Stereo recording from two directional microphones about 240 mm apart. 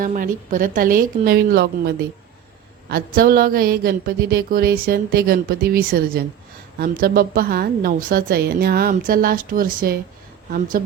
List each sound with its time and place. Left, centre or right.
0.0 s a woman's voice: right